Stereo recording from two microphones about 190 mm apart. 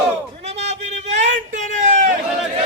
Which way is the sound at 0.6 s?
35° right (ahead or behind).